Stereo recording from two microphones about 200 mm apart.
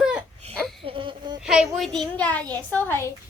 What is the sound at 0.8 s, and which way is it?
Speech, 25° right (ahead or behind).